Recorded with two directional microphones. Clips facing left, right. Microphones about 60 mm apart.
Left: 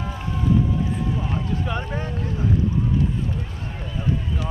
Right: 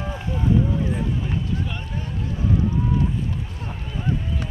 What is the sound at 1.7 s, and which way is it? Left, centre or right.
Boat, left.